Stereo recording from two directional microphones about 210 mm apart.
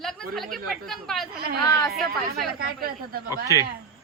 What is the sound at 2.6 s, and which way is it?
Speech, 45° right (ahead or behind).